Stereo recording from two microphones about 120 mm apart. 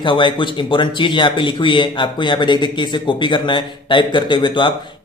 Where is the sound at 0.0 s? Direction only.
45° left (ahead or behind).